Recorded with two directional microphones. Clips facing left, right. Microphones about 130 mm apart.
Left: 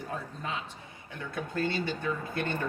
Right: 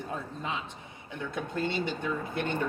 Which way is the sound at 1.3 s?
20° right (ahead or behind).